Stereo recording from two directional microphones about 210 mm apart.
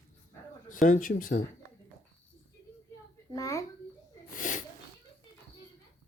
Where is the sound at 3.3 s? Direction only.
15° left (ahead or behind).